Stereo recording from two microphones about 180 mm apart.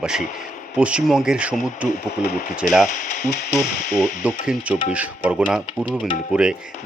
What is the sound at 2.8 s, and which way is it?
Speech, 45° left (ahead or behind).